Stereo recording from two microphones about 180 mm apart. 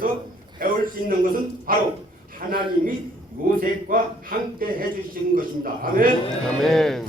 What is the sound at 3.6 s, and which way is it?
A man's voice, 50° right (ahead or behind).